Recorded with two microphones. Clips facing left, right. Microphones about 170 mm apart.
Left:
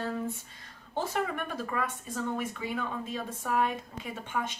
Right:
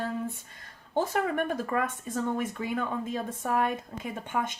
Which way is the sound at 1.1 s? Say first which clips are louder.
Right 4 dB; 50° right (ahead or behind).